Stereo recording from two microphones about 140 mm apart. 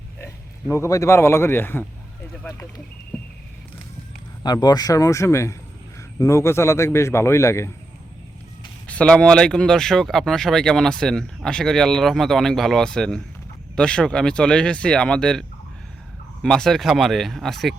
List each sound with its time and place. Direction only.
0.2 s a man's voice: 20° left (ahead or behind)
4.4 s a man's voice: 30° left (ahead or behind)
8.9 s speech: 5° left (ahead or behind)